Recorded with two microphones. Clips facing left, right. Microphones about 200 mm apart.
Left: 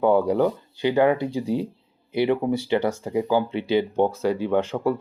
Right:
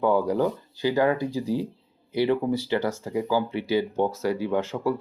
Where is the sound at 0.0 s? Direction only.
25° left (ahead or behind).